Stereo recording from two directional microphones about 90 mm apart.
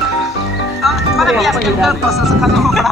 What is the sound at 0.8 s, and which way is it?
Speech, centre (ahead or behind).